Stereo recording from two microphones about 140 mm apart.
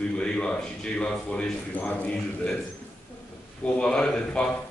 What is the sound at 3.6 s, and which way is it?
Speech, 5° left (ahead or behind).